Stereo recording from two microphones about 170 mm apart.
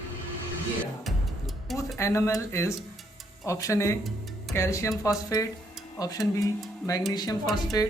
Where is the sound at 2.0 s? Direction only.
15° left (ahead or behind).